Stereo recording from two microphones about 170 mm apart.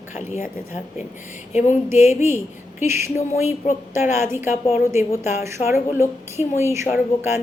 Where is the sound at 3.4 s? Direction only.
40° left (ahead or behind).